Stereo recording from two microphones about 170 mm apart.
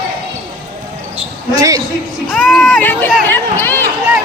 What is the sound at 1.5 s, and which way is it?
Speech, 20° right (ahead or behind).